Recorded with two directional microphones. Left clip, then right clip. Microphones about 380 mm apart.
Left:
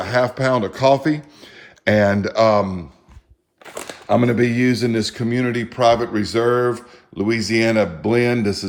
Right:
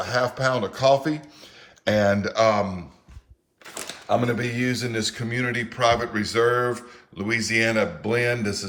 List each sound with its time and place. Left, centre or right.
0.0 s speech: centre
4.3 s speech: centre